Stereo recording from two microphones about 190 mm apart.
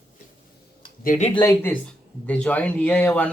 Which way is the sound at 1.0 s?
40° left (ahead or behind).